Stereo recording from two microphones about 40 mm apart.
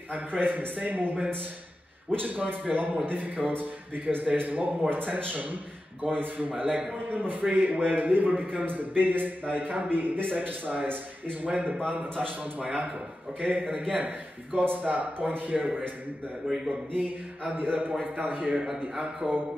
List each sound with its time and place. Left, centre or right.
0.1 s a man's voice: right
14.5 s speech: right
14.9 s a man's voice: right
16.4 s a man's voice: centre
17.5 s a man's voice: right